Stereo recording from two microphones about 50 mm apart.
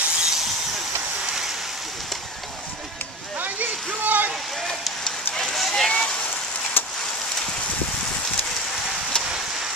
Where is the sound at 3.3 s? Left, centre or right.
Right.